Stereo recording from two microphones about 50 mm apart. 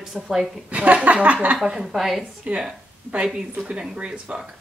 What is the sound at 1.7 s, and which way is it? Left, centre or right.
Speech, centre.